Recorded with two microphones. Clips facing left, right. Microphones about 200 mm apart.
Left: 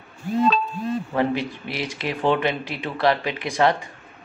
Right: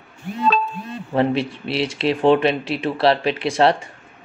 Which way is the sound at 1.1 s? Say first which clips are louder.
Right 6 dB; 25° right (ahead or behind).